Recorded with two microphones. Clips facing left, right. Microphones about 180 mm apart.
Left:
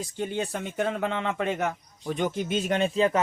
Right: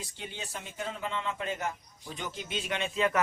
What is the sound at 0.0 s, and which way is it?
Speech, 50° left (ahead or behind).